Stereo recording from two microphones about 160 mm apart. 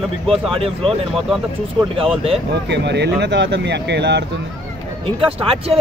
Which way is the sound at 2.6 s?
90° right.